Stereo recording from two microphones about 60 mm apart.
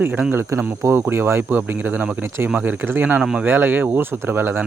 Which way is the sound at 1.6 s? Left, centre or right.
Right.